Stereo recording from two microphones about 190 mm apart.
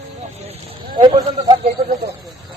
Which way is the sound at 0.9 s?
25° right (ahead or behind).